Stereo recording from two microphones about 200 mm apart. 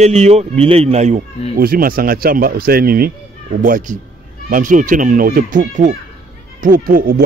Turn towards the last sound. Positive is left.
turn(degrees=-45)  # may be behind; listen again after turning